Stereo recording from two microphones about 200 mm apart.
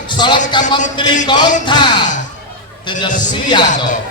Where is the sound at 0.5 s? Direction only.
20° left (ahead or behind).